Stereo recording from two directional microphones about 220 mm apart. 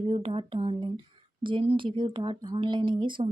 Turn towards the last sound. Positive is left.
turn(degrees=-20)  # may be behind; listen again after turning